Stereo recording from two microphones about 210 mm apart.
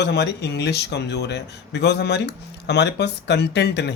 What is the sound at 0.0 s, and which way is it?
Speech, 50° left (ahead or behind).